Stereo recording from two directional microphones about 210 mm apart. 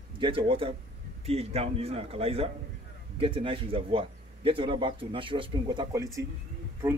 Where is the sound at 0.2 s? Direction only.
25° right (ahead or behind).